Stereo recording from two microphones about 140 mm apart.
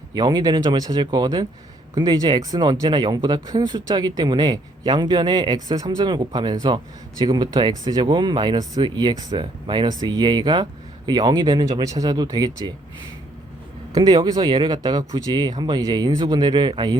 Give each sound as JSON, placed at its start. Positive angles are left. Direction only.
{"t": 0.1, "sound": "speech", "side_deg": -30}
{"t": 13.9, "sound": "speech", "side_deg": -30}